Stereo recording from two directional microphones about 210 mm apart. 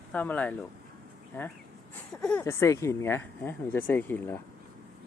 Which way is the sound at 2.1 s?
5° left (ahead or behind).